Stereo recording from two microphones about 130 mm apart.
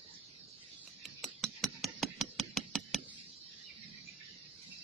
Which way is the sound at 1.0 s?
Centre (ahead or behind).